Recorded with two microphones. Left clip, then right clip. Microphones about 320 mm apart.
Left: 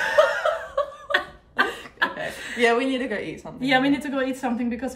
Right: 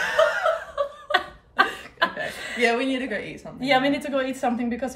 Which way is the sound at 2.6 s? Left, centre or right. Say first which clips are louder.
Left 2 dB; centre.